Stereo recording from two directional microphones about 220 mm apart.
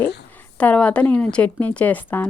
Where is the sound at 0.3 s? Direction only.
5° left (ahead or behind).